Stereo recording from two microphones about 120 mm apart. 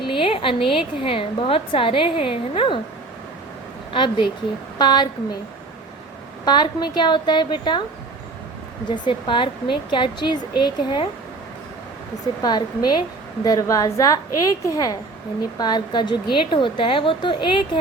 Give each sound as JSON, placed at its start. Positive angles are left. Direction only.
{"t": 0.1, "sound": "a woman's voice", "side_deg": 50}
{"t": 3.9, "sound": "a woman's voice", "side_deg": 45}
{"t": 6.4, "sound": "a woman's voice", "side_deg": 40}
{"t": 9.0, "sound": "a woman's voice", "side_deg": 45}
{"t": 12.4, "sound": "a woman's voice", "side_deg": 35}